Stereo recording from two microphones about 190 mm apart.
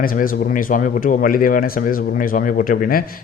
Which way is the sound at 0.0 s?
50° left (ahead or behind).